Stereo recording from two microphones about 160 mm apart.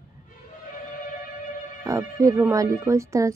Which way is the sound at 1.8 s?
20° right (ahead or behind).